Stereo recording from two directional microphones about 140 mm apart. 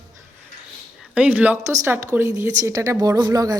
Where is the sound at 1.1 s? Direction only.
10° right (ahead or behind); by 3.6 s 25° right (ahead or behind).